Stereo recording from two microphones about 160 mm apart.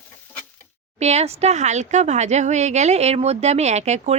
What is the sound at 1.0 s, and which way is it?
Speech, 45° right (ahead or behind).